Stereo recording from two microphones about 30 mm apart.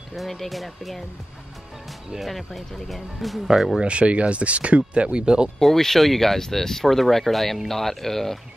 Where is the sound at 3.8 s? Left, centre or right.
Right.